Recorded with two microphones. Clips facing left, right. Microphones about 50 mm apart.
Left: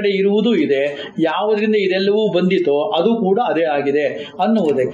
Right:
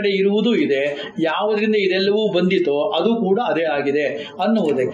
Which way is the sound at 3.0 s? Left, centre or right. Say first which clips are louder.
Left 2 dB; left.